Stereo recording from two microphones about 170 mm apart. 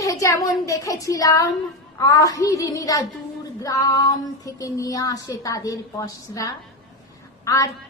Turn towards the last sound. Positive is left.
turn(degrees=20)  # may be behind; listen again after turning